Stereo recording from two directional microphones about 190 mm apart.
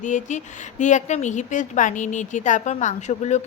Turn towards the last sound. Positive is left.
turn(degrees=35)  # may be behind; listen again after turning